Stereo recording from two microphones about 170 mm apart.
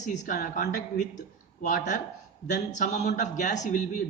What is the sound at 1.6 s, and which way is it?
A man's voice, 50° left (ahead or behind).